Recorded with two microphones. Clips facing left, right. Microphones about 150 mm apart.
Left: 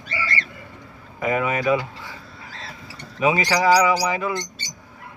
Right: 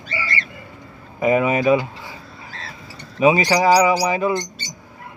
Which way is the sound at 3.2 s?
20° right (ahead or behind).